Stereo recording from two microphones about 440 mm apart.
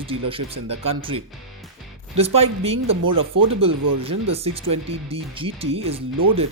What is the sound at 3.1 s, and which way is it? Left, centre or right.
Speech, right.